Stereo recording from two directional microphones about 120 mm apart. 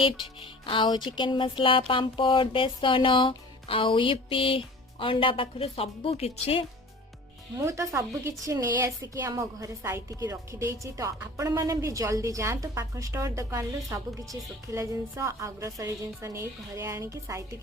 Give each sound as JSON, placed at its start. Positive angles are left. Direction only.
{"t": 0.0, "sound": "speech", "side_deg": 45}
{"t": 7.6, "sound": "a woman's voice", "side_deg": -25}